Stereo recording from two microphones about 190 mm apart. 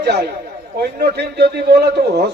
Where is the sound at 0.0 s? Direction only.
60° right (ahead or behind).